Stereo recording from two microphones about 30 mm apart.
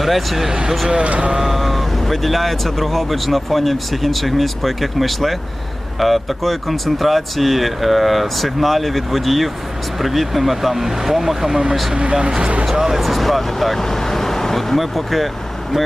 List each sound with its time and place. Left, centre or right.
0.0 s speech: centre
1.0 s speech: right
1.4 s speech: centre
13.0 s speech: centre
14.8 s speech: centre